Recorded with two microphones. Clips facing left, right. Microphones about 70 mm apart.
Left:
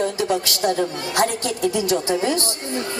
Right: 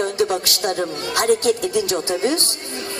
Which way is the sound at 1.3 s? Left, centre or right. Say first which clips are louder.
Right 6 dB; right.